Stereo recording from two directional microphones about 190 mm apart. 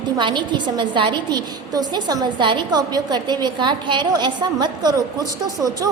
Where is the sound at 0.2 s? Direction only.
25° right (ahead or behind).